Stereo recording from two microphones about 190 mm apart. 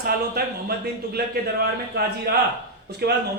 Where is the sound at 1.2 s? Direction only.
55° right (ahead or behind).